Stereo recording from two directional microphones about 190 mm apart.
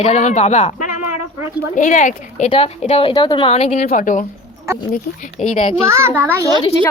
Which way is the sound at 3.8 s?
45° left (ahead or behind).